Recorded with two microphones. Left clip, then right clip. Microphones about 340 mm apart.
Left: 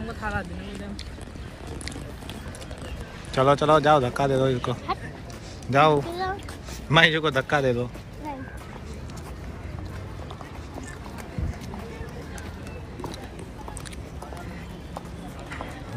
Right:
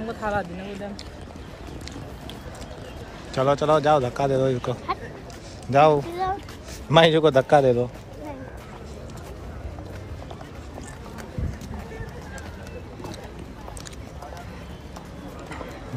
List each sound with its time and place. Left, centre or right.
0.2 s speech: right
3.3 s a man's voice: centre